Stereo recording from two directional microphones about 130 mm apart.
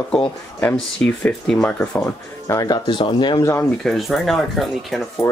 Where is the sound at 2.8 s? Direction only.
40° left (ahead or behind).